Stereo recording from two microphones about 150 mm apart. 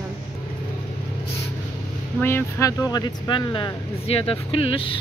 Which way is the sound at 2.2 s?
20° left (ahead or behind).